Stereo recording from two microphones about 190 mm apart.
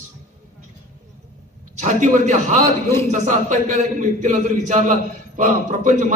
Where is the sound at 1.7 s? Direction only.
40° right (ahead or behind).